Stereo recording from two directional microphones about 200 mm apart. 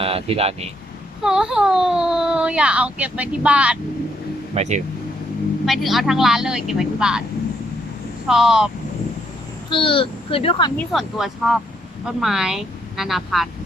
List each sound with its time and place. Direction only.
0.0 s speech: 30° right (ahead or behind)
1.2 s speech: 5° right (ahead or behind)
4.5 s speech: 35° right (ahead or behind)
5.6 s speech: centre (ahead or behind)
8.3 s speech: centre (ahead or behind)
9.6 s speech: 25° left (ahead or behind)
10.8 s speech: centre (ahead or behind)